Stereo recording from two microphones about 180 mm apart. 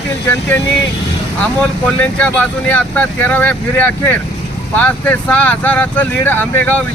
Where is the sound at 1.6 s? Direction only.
10° left (ahead or behind).